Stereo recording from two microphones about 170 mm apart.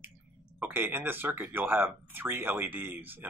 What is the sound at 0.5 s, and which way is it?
Speech, 10° right (ahead or behind).